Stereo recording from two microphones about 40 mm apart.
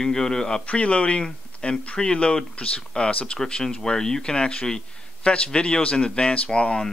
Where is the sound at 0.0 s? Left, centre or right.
Centre.